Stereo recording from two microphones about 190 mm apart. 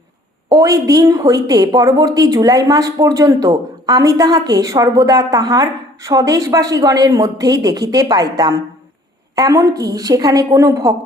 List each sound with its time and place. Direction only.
0.5 s a woman's voice: 20° right (ahead or behind)